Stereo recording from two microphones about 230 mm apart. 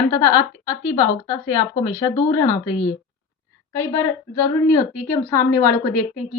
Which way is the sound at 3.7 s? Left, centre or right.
Centre.